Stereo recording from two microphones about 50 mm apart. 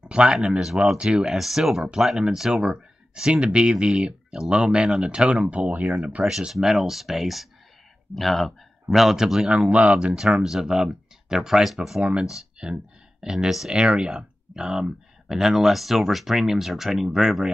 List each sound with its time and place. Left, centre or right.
0.1 s speech: centre
6.2 s speech: centre
6.5 s speech: centre
9.5 s speech: right
10.1 s speech: centre
12.0 s speech: centre